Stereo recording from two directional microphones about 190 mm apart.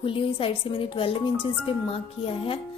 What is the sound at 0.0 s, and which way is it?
Speech, 30° left (ahead or behind).